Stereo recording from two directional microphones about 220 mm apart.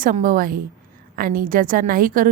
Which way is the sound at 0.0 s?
35° right (ahead or behind).